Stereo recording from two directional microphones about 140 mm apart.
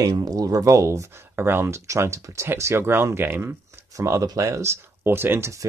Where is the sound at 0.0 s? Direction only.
25° right (ahead or behind).